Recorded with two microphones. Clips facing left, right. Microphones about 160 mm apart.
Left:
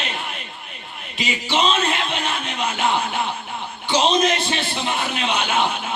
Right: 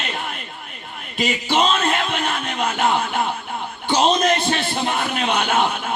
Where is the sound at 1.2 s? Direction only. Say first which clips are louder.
Right 2 dB; 50° right (ahead or behind).